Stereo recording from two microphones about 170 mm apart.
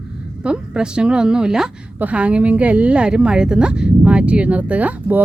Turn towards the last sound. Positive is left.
turn(degrees=-10)  # may be behind; listen again after turning